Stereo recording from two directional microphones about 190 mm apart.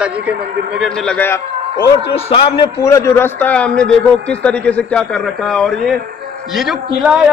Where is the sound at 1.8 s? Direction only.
30° left (ahead or behind); by 6.8 s centre (ahead or behind).